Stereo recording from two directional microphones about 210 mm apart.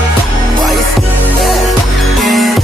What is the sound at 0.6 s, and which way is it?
Music, centre (ahead or behind).